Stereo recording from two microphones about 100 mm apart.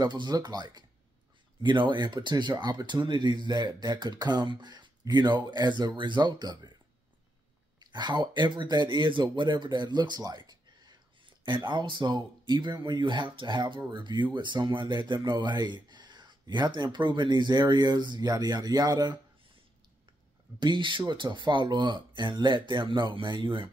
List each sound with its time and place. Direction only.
0.0 s speech: 45° right (ahead or behind)
7.8 s speech: 45° right (ahead or behind)
20.5 s speech: 55° right (ahead or behind)